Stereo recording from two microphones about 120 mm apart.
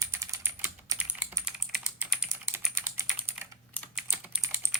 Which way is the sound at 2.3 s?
25° right (ahead or behind).